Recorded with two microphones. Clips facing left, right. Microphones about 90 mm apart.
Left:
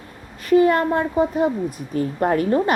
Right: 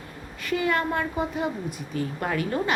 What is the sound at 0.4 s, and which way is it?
A woman's voice, 40° left (ahead or behind).